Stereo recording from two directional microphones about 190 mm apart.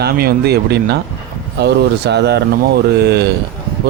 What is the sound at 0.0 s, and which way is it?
Mantra, 55° right (ahead or behind).